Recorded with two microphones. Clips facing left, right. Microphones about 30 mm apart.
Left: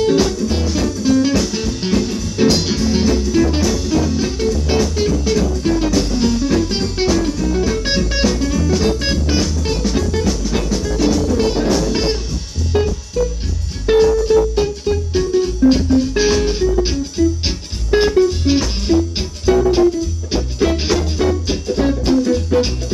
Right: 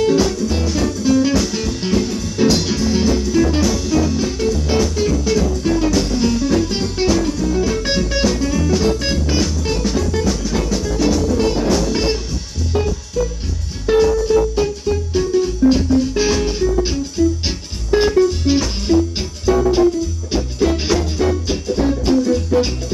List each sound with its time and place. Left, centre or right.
0.0 s music: centre
2.3 s music: centre
8.8 s music: centre
12.7 s music: left
13.2 s music: centre